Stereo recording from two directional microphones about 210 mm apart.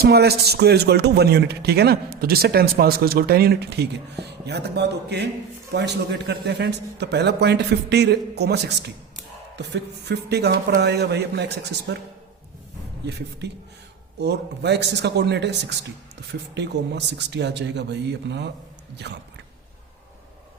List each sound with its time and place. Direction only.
0.0 s speech: 50° right (ahead or behind)
13.4 s speech: 55° right (ahead or behind)
16.6 s a man's voice: 55° right (ahead or behind)